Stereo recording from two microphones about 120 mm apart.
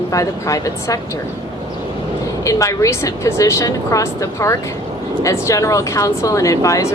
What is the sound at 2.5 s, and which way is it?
Speech, 25° left (ahead or behind).